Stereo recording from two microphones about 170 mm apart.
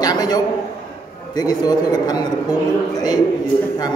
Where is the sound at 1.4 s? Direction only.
25° left (ahead or behind).